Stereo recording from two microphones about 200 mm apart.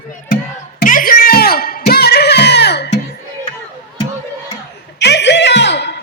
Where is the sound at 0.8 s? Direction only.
45° left (ahead or behind).